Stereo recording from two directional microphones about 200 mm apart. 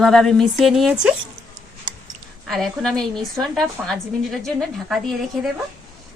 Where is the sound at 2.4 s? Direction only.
Centre (ahead or behind).